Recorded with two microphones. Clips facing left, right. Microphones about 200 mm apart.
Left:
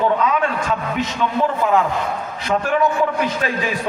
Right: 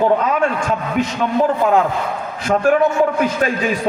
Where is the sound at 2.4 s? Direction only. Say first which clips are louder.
Right 5 dB; 50° right (ahead or behind).